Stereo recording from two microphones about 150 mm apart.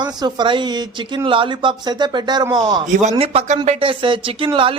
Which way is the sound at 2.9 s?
50° right (ahead or behind).